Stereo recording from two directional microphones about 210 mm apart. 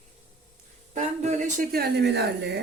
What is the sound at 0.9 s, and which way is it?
Speech, 35° right (ahead or behind).